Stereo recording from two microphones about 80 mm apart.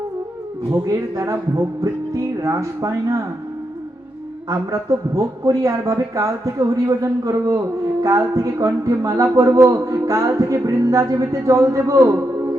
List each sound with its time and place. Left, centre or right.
0.7 s speech: right
4.4 s speech: right